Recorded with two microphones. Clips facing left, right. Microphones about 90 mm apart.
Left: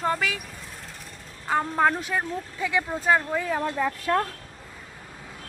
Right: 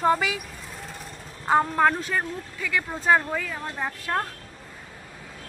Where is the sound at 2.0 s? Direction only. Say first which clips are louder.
Even; 15° left (ahead or behind).